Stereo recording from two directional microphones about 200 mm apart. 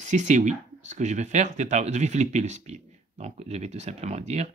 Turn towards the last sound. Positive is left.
turn(degrees=-35)  # may be behind; listen again after turning